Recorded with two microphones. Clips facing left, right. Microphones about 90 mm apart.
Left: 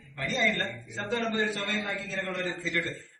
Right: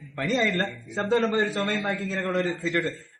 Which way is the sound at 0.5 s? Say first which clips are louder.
Right 6 dB; 45° right (ahead or behind).